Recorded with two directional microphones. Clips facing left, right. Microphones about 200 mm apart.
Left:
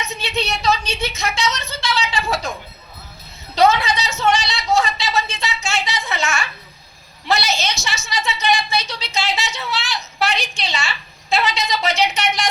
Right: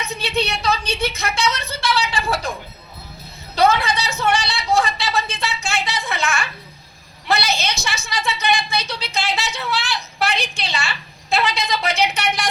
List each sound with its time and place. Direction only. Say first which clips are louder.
0.0 s a sound: right 2 dB; 60° right (ahead or behind)
4.2 s music: left 2 dB; 55° right (ahead or behind)
7.3 s a woman's voice: left 1 dB; 55° right (ahead or behind)